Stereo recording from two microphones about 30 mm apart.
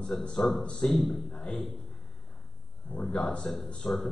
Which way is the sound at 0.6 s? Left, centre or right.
Left.